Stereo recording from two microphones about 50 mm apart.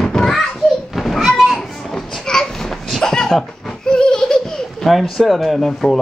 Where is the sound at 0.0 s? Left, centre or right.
Centre.